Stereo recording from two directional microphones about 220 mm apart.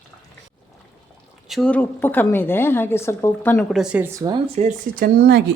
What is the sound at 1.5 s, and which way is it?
A woman's voice, centre (ahead or behind).